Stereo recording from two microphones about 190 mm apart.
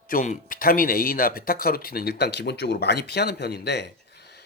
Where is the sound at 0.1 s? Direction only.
45° left (ahead or behind).